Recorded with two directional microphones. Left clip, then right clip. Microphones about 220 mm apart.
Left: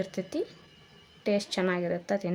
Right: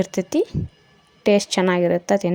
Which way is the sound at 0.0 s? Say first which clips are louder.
Right 11 dB; 35° right (ahead or behind).